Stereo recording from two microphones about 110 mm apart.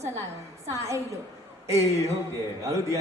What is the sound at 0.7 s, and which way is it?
A man's voice, 25° right (ahead or behind).